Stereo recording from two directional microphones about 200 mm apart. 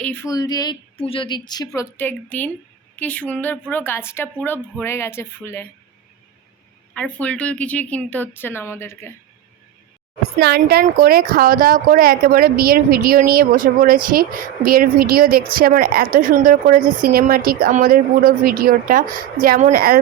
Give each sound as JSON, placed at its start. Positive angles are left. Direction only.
{"t": 0.0, "sound": "a woman's voice", "side_deg": 10}
{"t": 6.9, "sound": "speech", "side_deg": 5}
{"t": 10.4, "sound": "a woman's voice", "side_deg": -50}